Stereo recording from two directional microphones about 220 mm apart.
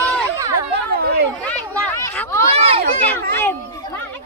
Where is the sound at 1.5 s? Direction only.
10° left (ahead or behind).